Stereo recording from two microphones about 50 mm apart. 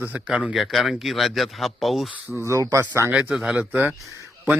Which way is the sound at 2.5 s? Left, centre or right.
Right.